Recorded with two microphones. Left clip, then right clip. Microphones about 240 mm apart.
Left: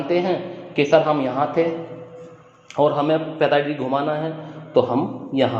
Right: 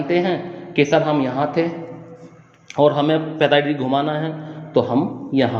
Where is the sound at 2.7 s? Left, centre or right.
Right.